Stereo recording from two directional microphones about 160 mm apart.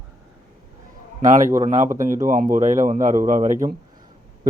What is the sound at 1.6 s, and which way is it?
Speech, 50° right (ahead or behind).